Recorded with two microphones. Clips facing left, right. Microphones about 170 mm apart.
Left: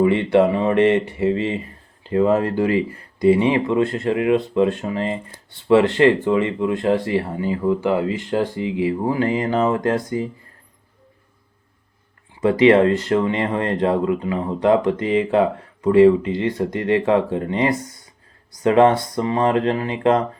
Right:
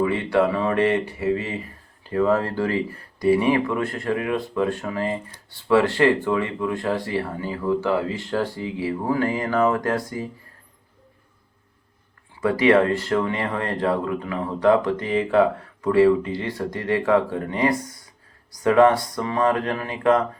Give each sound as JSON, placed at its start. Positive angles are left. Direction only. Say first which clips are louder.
{"t": 0.0, "sound": "speech", "louder": "left 5 dB", "side_deg": 25}
{"t": 12.4, "sound": "speech", "louder": "left 4 dB", "side_deg": 25}